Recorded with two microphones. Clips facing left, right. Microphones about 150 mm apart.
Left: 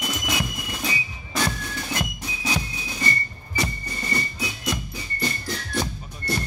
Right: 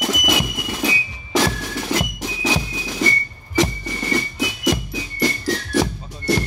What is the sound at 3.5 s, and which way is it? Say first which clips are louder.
Whistling: right 9 dB; 90° right.